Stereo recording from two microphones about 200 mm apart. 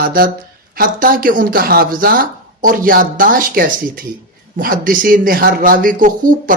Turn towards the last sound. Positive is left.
turn(degrees=-40)  # may be behind; listen again after turning